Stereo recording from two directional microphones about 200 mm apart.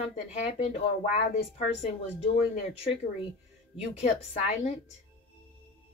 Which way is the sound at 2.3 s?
30° left (ahead or behind).